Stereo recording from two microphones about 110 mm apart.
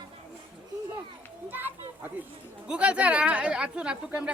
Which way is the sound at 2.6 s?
10° right (ahead or behind).